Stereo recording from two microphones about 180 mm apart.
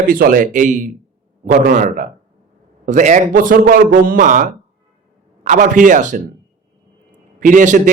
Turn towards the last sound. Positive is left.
turn(degrees=-45)  # may be behind; listen again after turning